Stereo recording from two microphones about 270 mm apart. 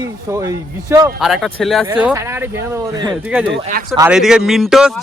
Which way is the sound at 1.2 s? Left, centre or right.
Centre.